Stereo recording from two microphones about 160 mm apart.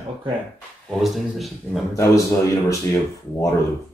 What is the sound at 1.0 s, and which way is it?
Speech, centre (ahead or behind).